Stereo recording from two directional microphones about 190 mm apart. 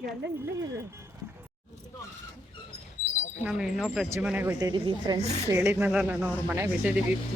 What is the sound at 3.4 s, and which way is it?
Speech, 5° right (ahead or behind).